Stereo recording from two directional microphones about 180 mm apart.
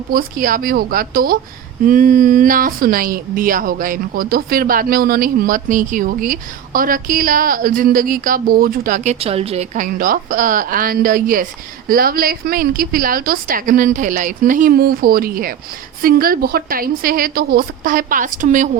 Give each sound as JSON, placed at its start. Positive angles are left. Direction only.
{"t": 0.1, "sound": "speech", "side_deg": -50}
{"t": 9.1, "sound": "speech", "side_deg": -35}